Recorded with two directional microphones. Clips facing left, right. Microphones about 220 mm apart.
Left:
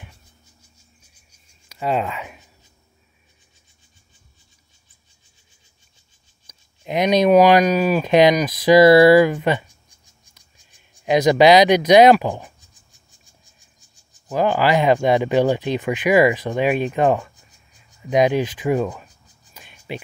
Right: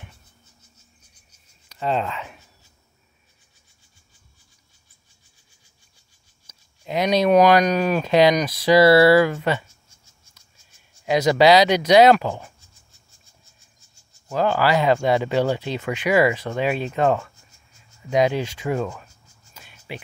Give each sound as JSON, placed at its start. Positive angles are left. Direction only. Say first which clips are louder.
{"t": 1.7, "sound": "speech", "louder": "left 2 dB", "side_deg": 10}
{"t": 6.8, "sound": "speech", "louder": "left 3 dB", "side_deg": 20}
{"t": 7.2, "sound": "speech", "louder": "left 2 dB", "side_deg": 5}
{"t": 8.0, "sound": "speech", "louder": "left 2 dB", "side_deg": 15}
{"t": 13.7, "sound": "speech", "louder": "left 2 dB", "side_deg": 15}
{"t": 18.0, "sound": "whispering", "louder": "left 3 dB", "side_deg": 15}